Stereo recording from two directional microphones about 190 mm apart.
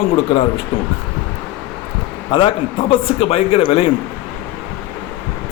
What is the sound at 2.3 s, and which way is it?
A man's voice, 25° left (ahead or behind).